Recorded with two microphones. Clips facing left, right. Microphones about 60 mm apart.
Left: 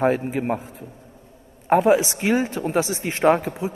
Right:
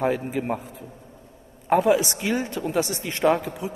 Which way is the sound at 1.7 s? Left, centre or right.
Left.